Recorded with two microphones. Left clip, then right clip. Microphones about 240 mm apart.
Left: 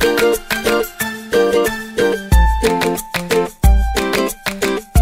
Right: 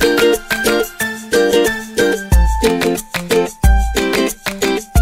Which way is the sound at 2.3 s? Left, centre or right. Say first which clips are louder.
Even; centre.